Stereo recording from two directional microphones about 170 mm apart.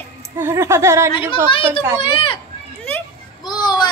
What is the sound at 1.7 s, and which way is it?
Speech, 30° left (ahead or behind).